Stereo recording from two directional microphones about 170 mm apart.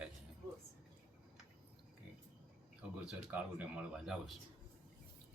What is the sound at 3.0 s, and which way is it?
Speech, 10° right (ahead or behind).